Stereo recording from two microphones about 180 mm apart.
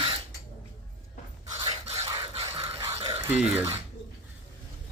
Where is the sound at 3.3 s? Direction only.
5° right (ahead or behind).